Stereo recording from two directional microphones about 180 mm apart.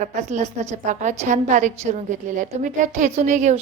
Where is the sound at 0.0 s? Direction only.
45° right (ahead or behind).